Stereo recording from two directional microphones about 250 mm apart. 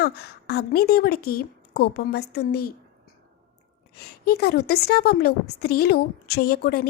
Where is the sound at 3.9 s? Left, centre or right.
Left.